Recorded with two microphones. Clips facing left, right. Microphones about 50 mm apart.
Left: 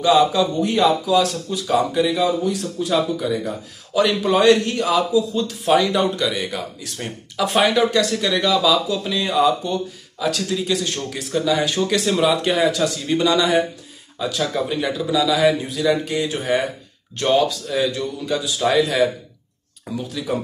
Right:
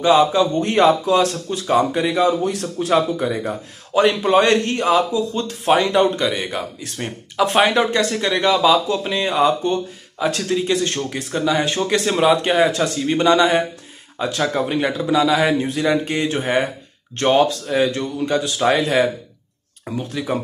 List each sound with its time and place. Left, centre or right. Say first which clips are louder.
0.0 s speech: right 1 dB; right
0.6 s speech: right 3 dB; right
2.2 s a man's voice: right 2 dB; right
2.9 s speech: right 2 dB; right
17.9 s a man's voice: right 3 dB; right
18.6 s speech: even; right
19.9 s speech: right 2 dB; right